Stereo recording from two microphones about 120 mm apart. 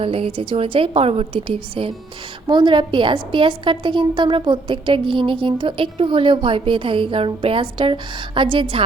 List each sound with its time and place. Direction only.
0.0 s a woman's voice: 50° right (ahead or behind)